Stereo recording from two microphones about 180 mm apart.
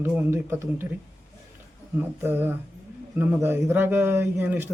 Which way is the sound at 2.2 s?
10° right (ahead or behind).